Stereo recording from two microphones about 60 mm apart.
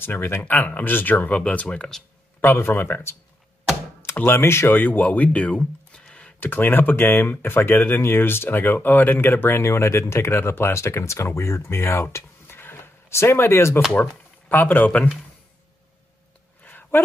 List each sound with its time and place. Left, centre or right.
0.0 s speech: left
2.4 s speech: left
4.2 s speech: left
4.7 s speech: left
6.4 s speech: left
14.5 s speech: left
16.6 s a sound: left